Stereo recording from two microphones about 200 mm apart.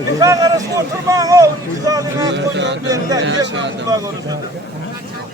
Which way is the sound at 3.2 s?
65° right (ahead or behind).